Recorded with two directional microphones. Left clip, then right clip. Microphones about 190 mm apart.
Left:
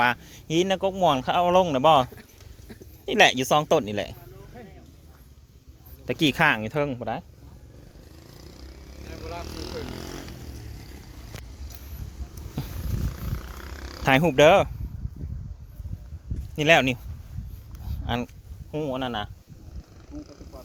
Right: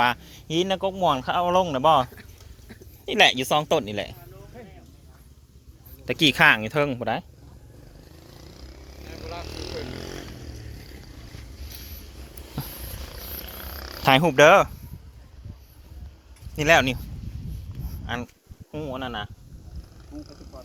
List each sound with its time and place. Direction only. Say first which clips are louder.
0.0 s speech: right 1 dB; 20° left (ahead or behind)
3.1 s speech: even; 25° left (ahead or behind)
6.1 s speech: right 4 dB; 15° left (ahead or behind); by 7.3 s 15° right (ahead or behind)
8.3 s vehicle: right 1 dB; 65° left (ahead or behind)
12.6 s wild animals: right 1 dB; 15° left (ahead or behind)
13.6 s a sound: right 3 dB; 65° left (ahead or behind)
14.0 s speech: right 2 dB; 10° left (ahead or behind)
16.6 s speech: right 1 dB; 20° left (ahead or behind)
17.8 s a sound: left 2 dB; 45° left (ahead or behind)
18.7 s speech: left 3 dB; 70° left (ahead or behind)